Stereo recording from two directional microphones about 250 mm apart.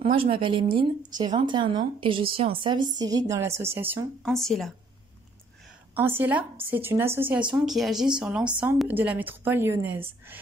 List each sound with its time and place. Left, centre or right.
0.0 s speech: right; by 4.7 s centre
5.9 s speech: centre